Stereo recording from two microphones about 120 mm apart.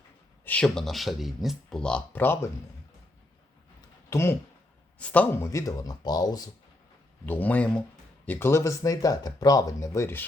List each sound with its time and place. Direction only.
0.4 s speech: 10° left (ahead or behind)
4.1 s speech: 20° left (ahead or behind)
7.3 s speech: 15° left (ahead or behind)